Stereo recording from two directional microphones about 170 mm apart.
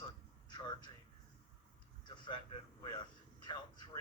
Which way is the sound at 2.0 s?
30° left (ahead or behind).